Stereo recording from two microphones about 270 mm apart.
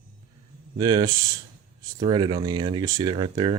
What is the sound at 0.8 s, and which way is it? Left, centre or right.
Speech, centre.